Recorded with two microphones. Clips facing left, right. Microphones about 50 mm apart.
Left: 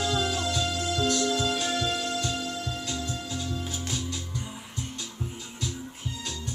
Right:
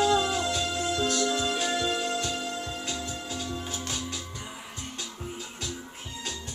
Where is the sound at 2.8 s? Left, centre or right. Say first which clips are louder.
Left 1 dB; right.